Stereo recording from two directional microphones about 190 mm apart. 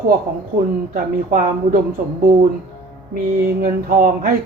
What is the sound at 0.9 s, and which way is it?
Speech, 45° right (ahead or behind).